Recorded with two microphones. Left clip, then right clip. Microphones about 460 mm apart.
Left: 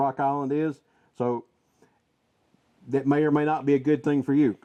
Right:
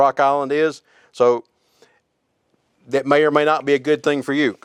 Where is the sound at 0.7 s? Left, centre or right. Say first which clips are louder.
Right 5 dB; right.